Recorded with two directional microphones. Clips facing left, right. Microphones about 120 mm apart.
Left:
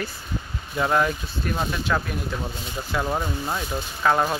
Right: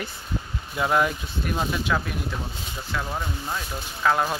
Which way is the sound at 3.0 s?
25° left (ahead or behind).